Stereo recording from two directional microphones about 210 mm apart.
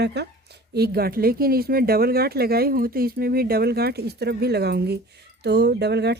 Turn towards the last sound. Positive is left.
turn(degrees=-50)  # may be behind; listen again after turning